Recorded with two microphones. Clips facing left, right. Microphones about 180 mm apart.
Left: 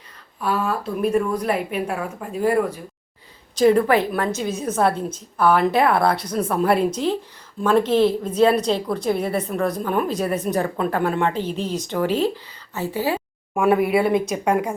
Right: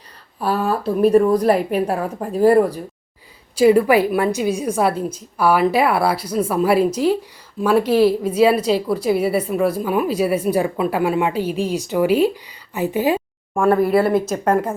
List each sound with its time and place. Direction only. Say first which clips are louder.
0.3 s a woman's voice: right 3 dB; 35° right (ahead or behind)
3.5 s a woman's voice: right 3 dB; 10° right (ahead or behind)
13.5 s speech: right 2 dB; 5° left (ahead or behind)
14.3 s a woman's voice: right 2 dB; 10° left (ahead or behind)